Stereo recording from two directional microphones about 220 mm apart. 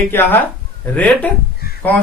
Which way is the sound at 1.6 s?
45° left (ahead or behind).